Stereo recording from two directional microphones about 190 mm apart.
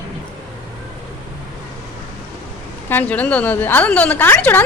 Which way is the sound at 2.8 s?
10° left (ahead or behind).